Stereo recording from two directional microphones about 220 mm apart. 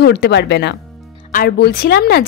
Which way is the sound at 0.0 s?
50° left (ahead or behind).